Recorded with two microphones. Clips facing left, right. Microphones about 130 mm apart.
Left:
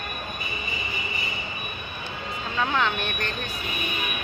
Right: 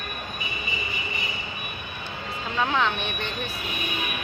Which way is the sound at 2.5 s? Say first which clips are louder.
Right 1 dB; centre (ahead or behind).